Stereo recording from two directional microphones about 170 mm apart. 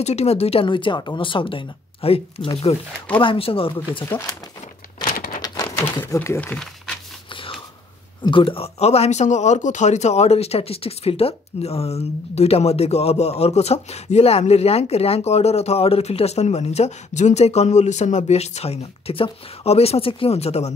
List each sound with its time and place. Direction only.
0.0 s speech: 40° left (ahead or behind)
4.0 s speech: 15° left (ahead or behind)
5.0 s a sound: 60° left (ahead or behind)
5.4 s speech: 20° left (ahead or behind)
8.2 s speech: 30° left (ahead or behind)